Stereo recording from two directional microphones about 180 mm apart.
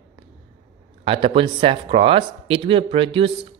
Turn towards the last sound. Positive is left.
turn(degrees=-30)  # may be behind; listen again after turning